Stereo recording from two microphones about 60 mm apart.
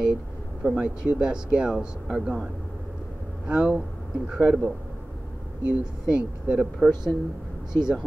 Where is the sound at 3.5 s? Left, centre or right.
Right.